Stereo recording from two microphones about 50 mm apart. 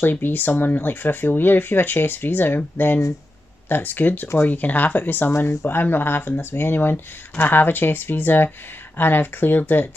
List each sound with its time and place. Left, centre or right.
0.0 s speech: left